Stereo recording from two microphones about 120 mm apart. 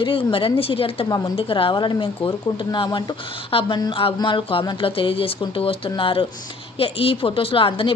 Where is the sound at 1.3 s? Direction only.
45° left (ahead or behind).